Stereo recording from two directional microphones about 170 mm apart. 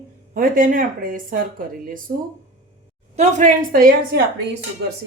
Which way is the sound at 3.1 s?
45° right (ahead or behind).